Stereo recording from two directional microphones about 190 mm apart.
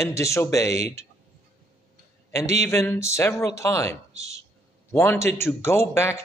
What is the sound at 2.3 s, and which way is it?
A man's voice, 15° left (ahead or behind).